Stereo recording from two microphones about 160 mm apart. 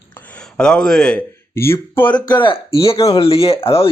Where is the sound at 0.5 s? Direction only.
5° left (ahead or behind).